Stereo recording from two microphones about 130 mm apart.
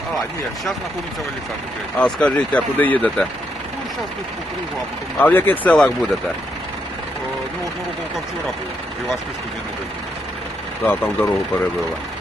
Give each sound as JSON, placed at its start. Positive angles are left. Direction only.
{"t": 2.0, "sound": "speech", "side_deg": 5}
{"t": 5.2, "sound": "speech", "side_deg": 15}
{"t": 10.8, "sound": "speech", "side_deg": 15}